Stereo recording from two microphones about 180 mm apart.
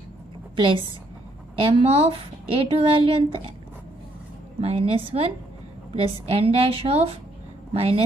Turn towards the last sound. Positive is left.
turn(degrees=-30)  # may be behind; listen again after turning